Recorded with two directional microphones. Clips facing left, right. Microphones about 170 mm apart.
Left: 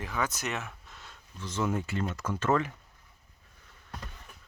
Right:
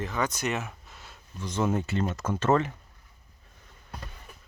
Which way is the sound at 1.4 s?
20° right (ahead or behind).